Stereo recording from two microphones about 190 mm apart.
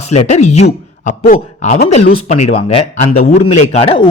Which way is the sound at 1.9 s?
35° left (ahead or behind).